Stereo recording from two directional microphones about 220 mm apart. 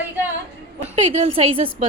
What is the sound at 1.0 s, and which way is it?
Speech, 30° right (ahead or behind).